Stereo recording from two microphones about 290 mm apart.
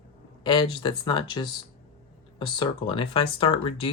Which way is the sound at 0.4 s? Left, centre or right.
Centre.